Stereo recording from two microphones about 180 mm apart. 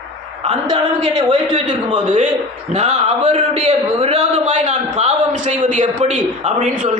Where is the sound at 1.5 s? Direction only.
40° right (ahead or behind).